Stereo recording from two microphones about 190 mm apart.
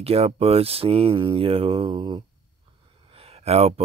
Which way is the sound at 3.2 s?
30° right (ahead or behind).